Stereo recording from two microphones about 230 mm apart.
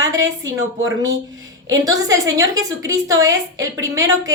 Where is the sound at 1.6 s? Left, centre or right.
Centre.